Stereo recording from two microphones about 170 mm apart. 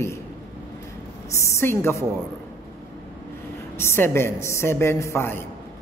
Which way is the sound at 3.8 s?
15° left (ahead or behind).